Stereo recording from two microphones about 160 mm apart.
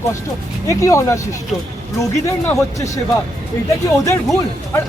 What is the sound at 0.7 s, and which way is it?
Speech, 20° left (ahead or behind).